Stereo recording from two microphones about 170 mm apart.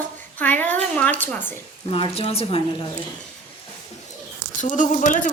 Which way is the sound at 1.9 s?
35° left (ahead or behind).